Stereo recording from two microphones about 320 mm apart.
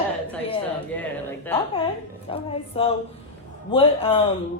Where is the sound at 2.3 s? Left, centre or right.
Centre.